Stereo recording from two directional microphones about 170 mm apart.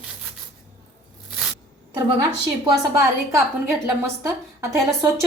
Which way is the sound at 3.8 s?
15° right (ahead or behind).